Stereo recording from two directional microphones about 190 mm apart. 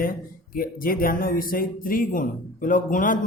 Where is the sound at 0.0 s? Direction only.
50° left (ahead or behind).